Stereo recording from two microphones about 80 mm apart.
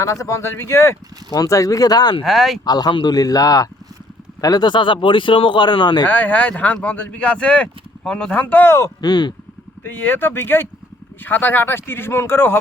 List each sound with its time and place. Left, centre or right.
0.0 s speech: left
1.3 s speech: left
2.2 s speech: centre
2.6 s speech: left
6.1 s speech: left
9.0 s speech: left
9.8 s speech: left